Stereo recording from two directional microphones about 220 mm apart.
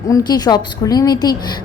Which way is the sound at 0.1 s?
20° left (ahead or behind).